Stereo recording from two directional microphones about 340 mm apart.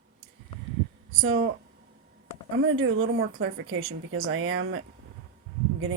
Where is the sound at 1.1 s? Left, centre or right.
Right.